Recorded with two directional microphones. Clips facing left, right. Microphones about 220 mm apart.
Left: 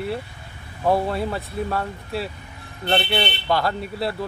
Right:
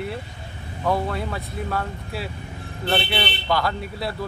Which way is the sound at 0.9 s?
30° left (ahead or behind).